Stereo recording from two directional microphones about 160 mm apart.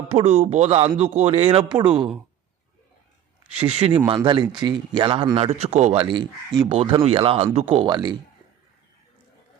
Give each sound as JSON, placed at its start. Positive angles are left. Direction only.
{"t": 0.1, "sound": "speech", "side_deg": -40}
{"t": 3.6, "sound": "speech", "side_deg": -40}
{"t": 5.5, "sound": "speech", "side_deg": -45}
{"t": 7.9, "sound": "speech", "side_deg": -25}